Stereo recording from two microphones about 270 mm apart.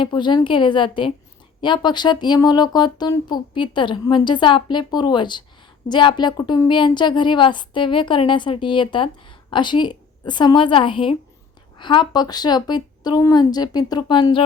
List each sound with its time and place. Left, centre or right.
0.0 s speech: centre